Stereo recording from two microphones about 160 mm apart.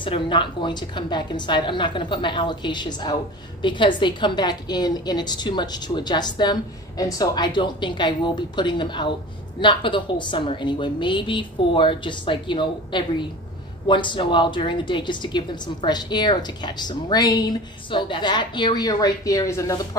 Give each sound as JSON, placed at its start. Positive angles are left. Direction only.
{"t": 0.0, "sound": "a woman's voice", "side_deg": 30}